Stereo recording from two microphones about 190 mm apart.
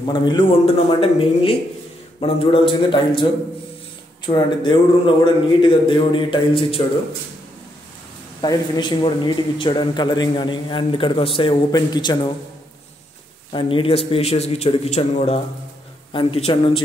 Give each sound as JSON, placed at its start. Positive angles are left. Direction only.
{"t": 0.0, "sound": "a man's voice", "side_deg": 20}
{"t": 4.3, "sound": "a man's voice", "side_deg": 25}
{"t": 8.4, "sound": "a man's voice", "side_deg": 25}
{"t": 13.5, "sound": "a man's voice", "side_deg": 25}